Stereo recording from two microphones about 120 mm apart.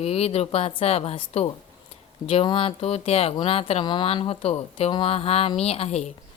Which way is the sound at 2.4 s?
45° left (ahead or behind).